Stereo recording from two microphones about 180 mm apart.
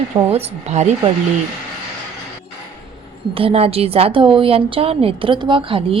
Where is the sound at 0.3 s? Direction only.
35° right (ahead or behind).